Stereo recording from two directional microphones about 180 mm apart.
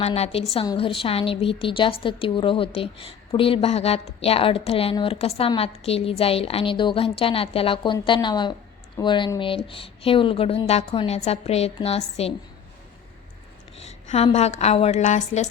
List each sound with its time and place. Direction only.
0.0 s a woman's voice: 35° left (ahead or behind)
13.8 s a sound: 40° left (ahead or behind)
14.3 s a woman's voice: 35° left (ahead or behind)